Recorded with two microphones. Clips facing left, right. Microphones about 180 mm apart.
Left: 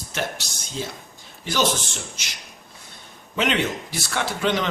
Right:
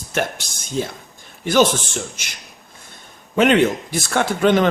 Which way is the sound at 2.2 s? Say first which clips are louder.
Right 1 dB; 50° right (ahead or behind).